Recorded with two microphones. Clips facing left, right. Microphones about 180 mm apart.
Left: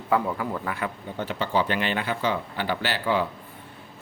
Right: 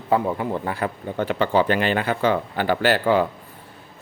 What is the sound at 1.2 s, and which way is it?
Speech, 55° right (ahead or behind).